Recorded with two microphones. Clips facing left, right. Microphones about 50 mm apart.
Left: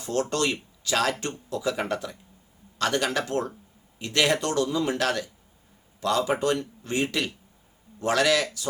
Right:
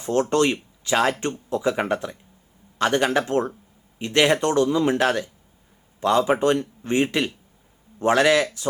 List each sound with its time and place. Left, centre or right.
0.0 s a man's voice: right